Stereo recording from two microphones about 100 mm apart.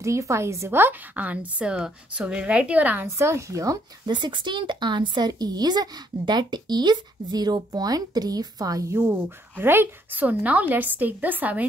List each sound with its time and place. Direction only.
0.0 s a woman's voice: 30° right (ahead or behind)
3.2 s speech: 30° right (ahead or behind)
4.1 s speech: 50° right (ahead or behind); by 9.0 s 30° right (ahead or behind)
9.0 s a woman's voice: 20° right (ahead or behind)